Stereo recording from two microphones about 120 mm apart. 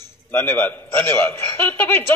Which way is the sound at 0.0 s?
15° left (ahead or behind).